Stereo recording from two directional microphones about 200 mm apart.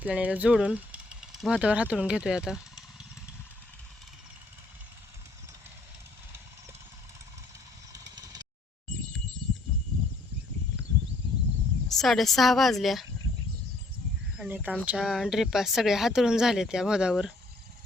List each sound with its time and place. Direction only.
0.0 s speech: 5° right (ahead or behind)
7.9 s vehicle: 20° right (ahead or behind)
11.9 s speech: centre (ahead or behind)
14.3 s speech: 10° right (ahead or behind)